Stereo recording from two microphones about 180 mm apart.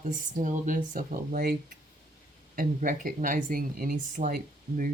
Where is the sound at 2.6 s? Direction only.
50° right (ahead or behind).